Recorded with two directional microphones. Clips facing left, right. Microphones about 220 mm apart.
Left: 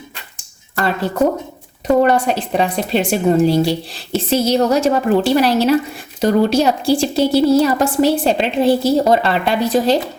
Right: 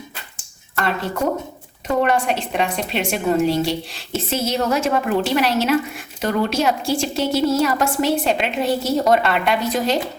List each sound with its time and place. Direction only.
2.0 s a woman's voice: 35° left (ahead or behind)